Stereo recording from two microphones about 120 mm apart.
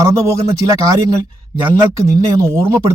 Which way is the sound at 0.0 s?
25° right (ahead or behind).